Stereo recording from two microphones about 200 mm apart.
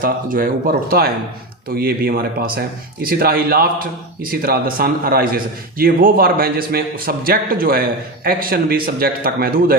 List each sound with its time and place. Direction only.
0.0 s a man's voice: 45° right (ahead or behind)